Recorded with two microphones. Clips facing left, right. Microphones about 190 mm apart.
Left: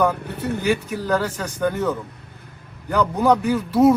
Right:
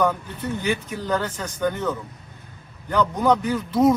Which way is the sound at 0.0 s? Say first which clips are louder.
Left 2 dB; 10° left (ahead or behind).